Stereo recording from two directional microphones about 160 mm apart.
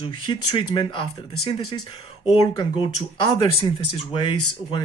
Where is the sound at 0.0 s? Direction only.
30° left (ahead or behind).